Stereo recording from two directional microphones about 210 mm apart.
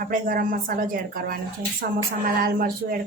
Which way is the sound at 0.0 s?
40° right (ahead or behind).